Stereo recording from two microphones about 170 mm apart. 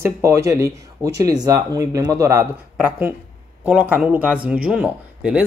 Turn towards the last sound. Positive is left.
turn(degrees=-5)  # may be behind; listen again after turning